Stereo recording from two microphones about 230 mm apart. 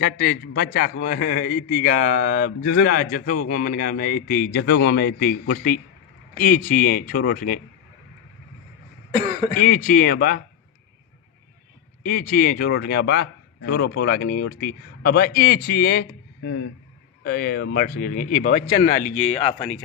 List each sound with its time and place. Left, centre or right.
0.0 s a man's voice: left
9.6 s a man's voice: left
12.0 s a man's voice: left